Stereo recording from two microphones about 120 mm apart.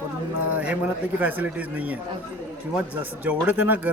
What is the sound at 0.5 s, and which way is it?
Speech, 10° right (ahead or behind).